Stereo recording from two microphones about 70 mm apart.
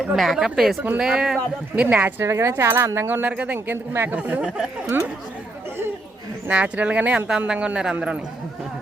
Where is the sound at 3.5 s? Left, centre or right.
Right.